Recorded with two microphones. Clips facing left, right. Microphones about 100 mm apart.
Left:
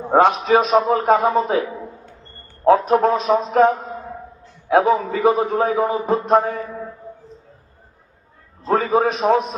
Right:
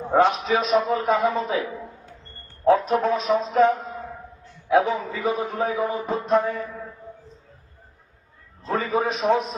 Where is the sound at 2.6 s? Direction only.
50° left (ahead or behind).